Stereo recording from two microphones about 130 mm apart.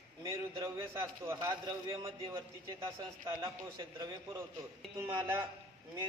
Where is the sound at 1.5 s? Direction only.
30° right (ahead or behind).